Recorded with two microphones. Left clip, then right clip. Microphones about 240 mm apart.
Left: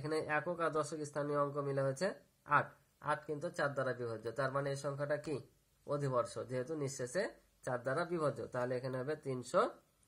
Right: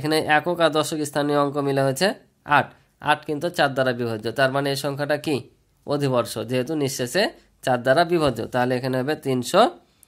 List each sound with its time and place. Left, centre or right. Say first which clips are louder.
0.0 s speech: right 17 dB; right